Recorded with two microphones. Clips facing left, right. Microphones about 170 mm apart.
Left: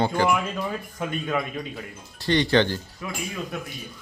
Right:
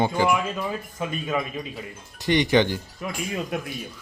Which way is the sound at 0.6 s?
5° right (ahead or behind).